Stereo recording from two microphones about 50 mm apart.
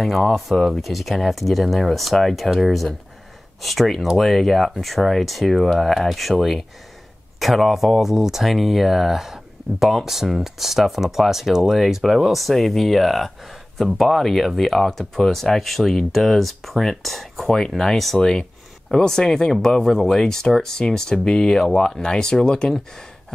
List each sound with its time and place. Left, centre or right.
0.0 s speech: centre